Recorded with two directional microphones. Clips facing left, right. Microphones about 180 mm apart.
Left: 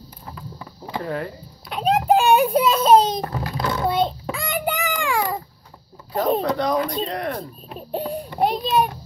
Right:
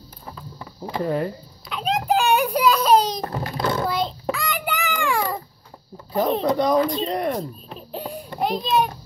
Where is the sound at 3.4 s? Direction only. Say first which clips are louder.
Right 4 dB; 30° right (ahead or behind).